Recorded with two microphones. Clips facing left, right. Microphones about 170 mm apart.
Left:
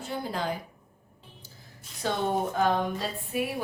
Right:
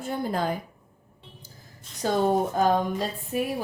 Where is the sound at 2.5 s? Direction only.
40° right (ahead or behind).